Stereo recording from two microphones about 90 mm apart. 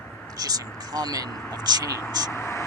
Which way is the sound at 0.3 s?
45° right (ahead or behind).